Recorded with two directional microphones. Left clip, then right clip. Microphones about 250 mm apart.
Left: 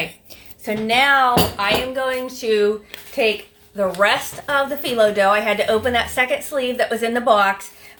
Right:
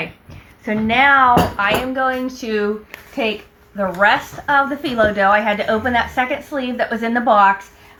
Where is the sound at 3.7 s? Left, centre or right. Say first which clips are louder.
Right 2 dB; left.